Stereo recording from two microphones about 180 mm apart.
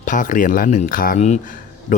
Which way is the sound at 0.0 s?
45° left (ahead or behind).